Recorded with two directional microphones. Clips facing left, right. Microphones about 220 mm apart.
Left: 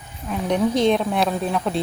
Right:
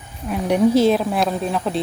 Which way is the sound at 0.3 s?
10° right (ahead or behind).